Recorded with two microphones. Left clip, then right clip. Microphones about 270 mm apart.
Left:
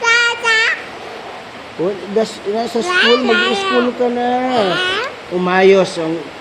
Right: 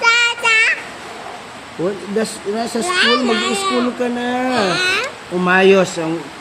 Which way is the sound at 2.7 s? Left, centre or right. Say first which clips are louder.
Left 2 dB; right.